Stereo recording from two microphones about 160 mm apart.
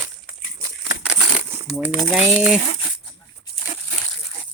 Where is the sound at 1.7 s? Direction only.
5° right (ahead or behind).